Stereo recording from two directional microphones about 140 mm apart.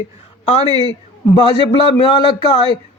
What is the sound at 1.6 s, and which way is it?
A man's voice, 40° left (ahead or behind).